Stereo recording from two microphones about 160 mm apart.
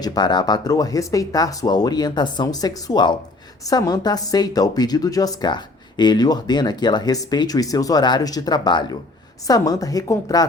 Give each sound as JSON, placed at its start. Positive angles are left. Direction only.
{"t": 0.0, "sound": "speech", "side_deg": 25}